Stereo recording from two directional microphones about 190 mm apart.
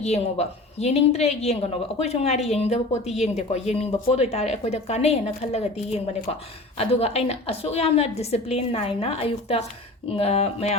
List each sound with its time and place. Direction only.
0.0 s a woman's voice: 35° left (ahead or behind)